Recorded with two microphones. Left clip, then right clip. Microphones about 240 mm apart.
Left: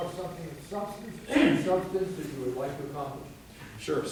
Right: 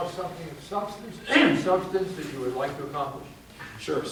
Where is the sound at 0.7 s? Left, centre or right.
Right.